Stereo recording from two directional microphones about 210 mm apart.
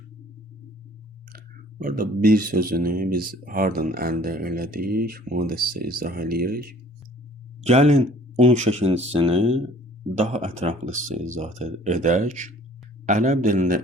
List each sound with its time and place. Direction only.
1.8 s speech: 45° right (ahead or behind)
7.6 s speech: 30° right (ahead or behind)